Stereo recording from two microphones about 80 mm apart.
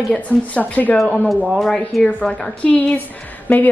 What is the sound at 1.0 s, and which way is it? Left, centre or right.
A woman's voice, centre.